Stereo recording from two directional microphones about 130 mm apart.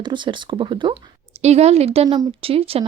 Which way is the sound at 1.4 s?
55° right (ahead or behind).